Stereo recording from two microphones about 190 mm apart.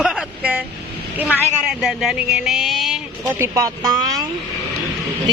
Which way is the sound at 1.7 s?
5° right (ahead or behind).